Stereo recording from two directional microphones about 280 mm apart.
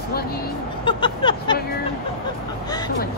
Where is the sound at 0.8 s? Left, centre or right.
Centre.